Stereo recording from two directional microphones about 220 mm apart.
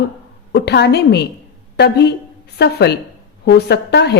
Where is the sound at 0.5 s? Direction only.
50° left (ahead or behind).